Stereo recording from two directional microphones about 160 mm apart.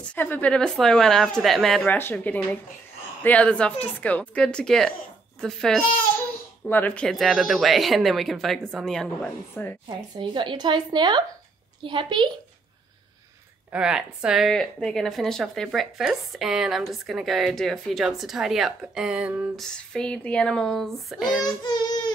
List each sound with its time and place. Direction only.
0.0 s a woman's voice: 10° left (ahead or behind)
9.8 s a woman's voice: 30° right (ahead or behind)
13.7 s a woman's voice: 5° right (ahead or behind)
19.6 s a woman's voice: 5° left (ahead or behind)
21.6 s a sound: 25° left (ahead or behind)